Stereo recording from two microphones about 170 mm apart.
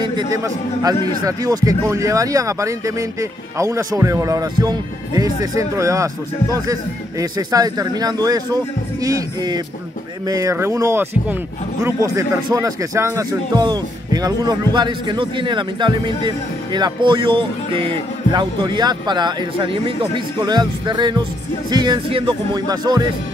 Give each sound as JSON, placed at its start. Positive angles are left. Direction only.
{"t": 0.3, "sound": "speech", "side_deg": -20}